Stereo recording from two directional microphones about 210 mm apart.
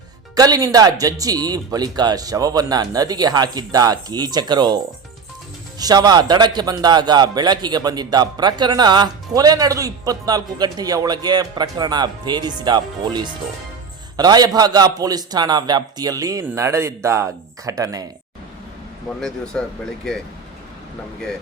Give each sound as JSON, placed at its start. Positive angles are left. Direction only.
{"t": 0.3, "sound": "speech", "side_deg": -15}
{"t": 5.8, "sound": "a man's voice", "side_deg": -20}
{"t": 19.1, "sound": "speech", "side_deg": 5}